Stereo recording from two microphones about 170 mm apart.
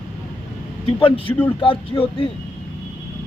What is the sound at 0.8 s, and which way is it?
Speech, 30° left (ahead or behind).